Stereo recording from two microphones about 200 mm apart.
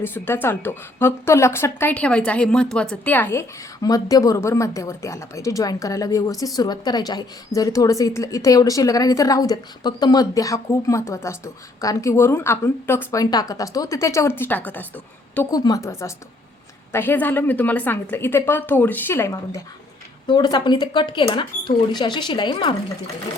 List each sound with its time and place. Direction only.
0.0 s a woman's voice: 10° left (ahead or behind)